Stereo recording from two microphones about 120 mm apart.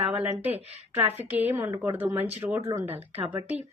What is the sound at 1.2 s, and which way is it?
A woman's voice, 15° right (ahead or behind).